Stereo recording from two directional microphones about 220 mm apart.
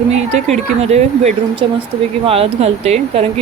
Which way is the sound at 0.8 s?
30° right (ahead or behind).